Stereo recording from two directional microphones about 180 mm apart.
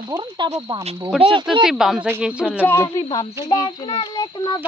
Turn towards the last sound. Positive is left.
turn(degrees=25)  # may be behind; listen again after turning